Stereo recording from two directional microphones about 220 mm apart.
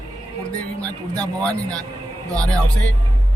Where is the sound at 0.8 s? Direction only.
15° right (ahead or behind).